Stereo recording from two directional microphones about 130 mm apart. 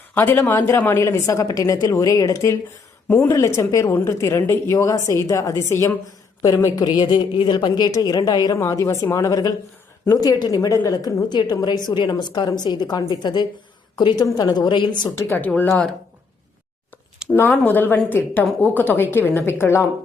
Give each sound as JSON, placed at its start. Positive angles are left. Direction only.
{"t": 0.1, "sound": "a woman's voice", "side_deg": 15}
{"t": 15.1, "sound": "a woman's voice", "side_deg": 15}
{"t": 17.3, "sound": "a woman's voice", "side_deg": 20}